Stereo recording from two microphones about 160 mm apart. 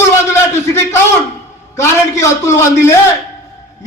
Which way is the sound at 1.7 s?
20° left (ahead or behind).